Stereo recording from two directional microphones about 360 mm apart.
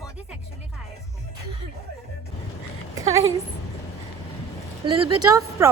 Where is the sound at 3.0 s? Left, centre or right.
Centre.